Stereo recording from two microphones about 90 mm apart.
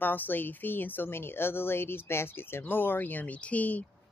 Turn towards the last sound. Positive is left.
turn(degrees=15)  # may be behind; listen again after turning